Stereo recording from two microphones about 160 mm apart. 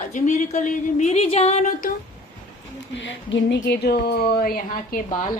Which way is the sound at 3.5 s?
85° left.